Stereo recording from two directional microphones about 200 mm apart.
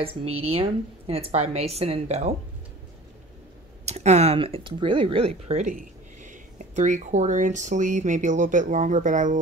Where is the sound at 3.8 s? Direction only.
35° right (ahead or behind).